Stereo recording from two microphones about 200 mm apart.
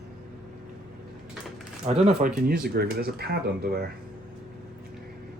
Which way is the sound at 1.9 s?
30° right (ahead or behind).